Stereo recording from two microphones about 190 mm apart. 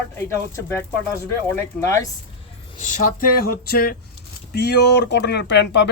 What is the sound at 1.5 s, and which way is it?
Speech, 15° left (ahead or behind).